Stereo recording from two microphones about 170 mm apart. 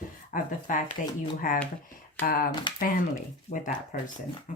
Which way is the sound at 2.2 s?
60° left (ahead or behind).